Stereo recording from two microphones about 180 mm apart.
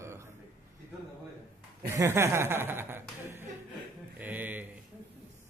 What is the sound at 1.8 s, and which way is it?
Sheep, 15° right (ahead or behind).